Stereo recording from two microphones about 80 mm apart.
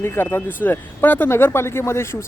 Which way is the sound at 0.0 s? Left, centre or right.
Left.